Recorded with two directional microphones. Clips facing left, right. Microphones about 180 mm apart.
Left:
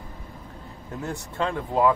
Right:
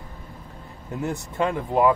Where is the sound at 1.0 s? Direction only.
20° right (ahead or behind).